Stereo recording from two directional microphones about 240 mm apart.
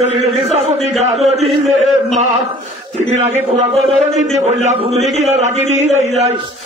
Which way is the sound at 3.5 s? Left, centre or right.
Right.